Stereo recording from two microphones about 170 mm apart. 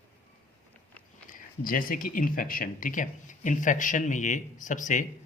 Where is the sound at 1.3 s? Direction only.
55° left (ahead or behind).